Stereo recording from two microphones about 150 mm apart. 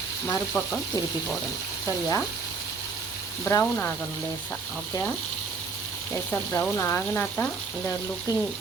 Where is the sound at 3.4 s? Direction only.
20° left (ahead or behind).